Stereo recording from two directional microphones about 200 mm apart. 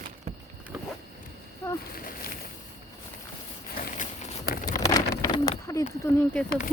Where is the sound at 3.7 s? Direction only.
40° left (ahead or behind).